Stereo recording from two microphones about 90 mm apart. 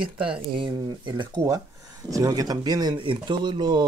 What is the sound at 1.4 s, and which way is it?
Speech, 40° right (ahead or behind).